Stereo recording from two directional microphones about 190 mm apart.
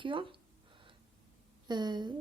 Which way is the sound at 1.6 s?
20° right (ahead or behind).